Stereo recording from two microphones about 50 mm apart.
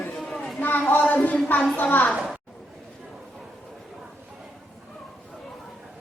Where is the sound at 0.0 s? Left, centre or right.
Centre.